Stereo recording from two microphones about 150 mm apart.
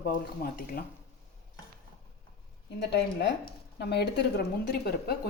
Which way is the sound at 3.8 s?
90° left.